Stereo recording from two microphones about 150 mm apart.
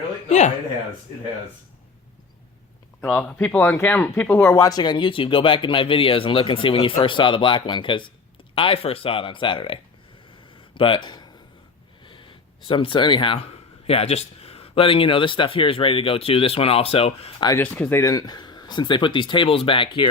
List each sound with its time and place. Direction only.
0.3 s speech: 50° left (ahead or behind)
3.0 s speech: 10° left (ahead or behind); by 11.3 s 30° left (ahead or behind)
12.0 s a sound: 35° left (ahead or behind)
13.8 s speech: 40° left (ahead or behind)
17.6 s speech: 10° left (ahead or behind); by 20.1 s 35° left (ahead or behind)